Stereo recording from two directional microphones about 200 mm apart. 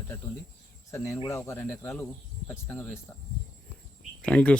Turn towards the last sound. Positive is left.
turn(degrees=5)  # may be behind; listen again after turning